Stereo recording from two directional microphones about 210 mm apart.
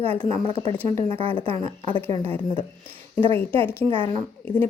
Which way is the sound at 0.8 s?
25° right (ahead or behind).